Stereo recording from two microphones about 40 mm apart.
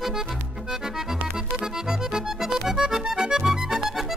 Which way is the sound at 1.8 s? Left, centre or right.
Centre.